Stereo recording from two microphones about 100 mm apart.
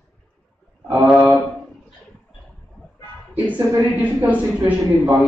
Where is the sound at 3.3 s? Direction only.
15° right (ahead or behind).